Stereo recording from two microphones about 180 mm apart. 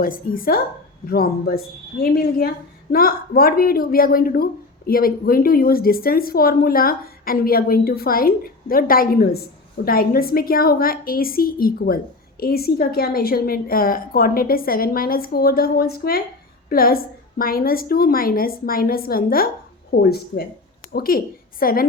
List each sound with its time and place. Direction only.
0.0 s a woman's voice: 50° left (ahead or behind)